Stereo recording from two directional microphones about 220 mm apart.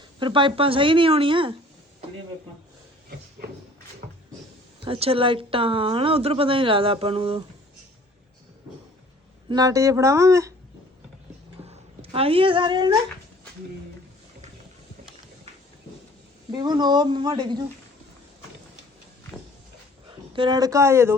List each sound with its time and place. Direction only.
0.2 s a woman's voice: 20° right (ahead or behind)
4.0 s cupboard open or close: 40° right (ahead or behind)
4.9 s a woman's voice: 25° right (ahead or behind)
9.5 s speech: 15° right (ahead or behind)
12.1 s a woman's voice: 25° right (ahead or behind)
16.5 s a woman's voice: 20° right (ahead or behind)
20.1 s speech: 20° right (ahead or behind)